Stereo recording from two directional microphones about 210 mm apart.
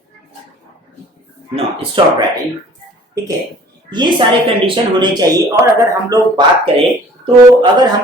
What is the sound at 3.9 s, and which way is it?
A woman's voice, 20° right (ahead or behind).